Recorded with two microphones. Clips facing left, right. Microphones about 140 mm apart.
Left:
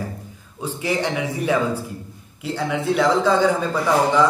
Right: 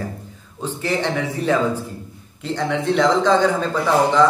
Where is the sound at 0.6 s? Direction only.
10° left (ahead or behind).